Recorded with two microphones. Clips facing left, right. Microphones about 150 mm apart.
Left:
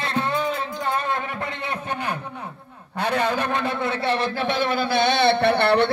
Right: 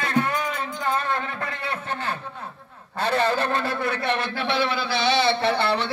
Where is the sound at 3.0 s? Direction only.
15° left (ahead or behind).